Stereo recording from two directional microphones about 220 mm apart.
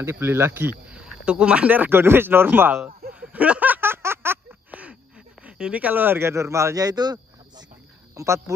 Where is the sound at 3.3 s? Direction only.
5° right (ahead or behind).